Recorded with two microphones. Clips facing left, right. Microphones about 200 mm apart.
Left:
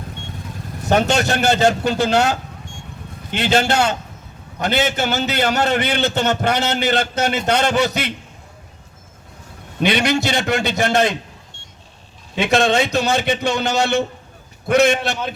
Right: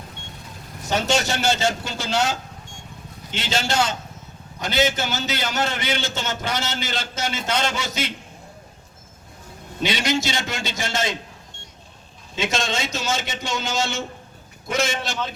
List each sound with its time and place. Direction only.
0.9 s a man's voice: 60° left (ahead or behind)
3.3 s a man's voice: 60° left (ahead or behind)
9.8 s a man's voice: 60° left (ahead or behind)
12.4 s a man's voice: 65° left (ahead or behind)